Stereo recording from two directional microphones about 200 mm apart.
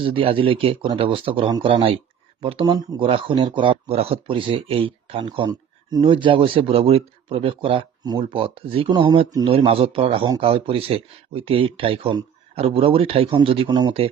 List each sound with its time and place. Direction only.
0.0 s speech: 25° right (ahead or behind)